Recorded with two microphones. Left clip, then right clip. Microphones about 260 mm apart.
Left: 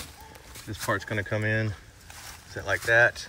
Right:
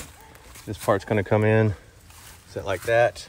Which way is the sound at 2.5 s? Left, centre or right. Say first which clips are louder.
Right 1 dB; centre.